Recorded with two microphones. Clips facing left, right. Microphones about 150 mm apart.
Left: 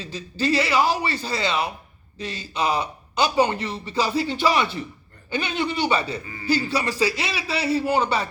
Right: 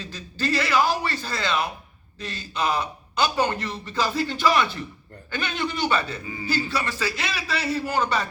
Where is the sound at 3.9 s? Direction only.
5° left (ahead or behind).